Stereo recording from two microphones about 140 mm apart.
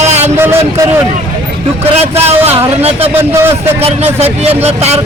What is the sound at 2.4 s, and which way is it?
Speech, 45° right (ahead or behind).